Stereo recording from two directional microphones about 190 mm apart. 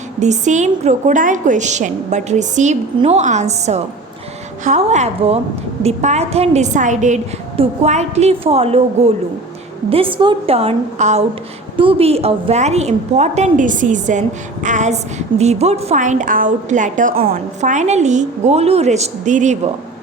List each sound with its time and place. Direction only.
0.2 s a woman's voice: 40° right (ahead or behind)